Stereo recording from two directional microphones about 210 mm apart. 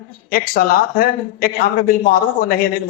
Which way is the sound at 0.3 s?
45° left (ahead or behind).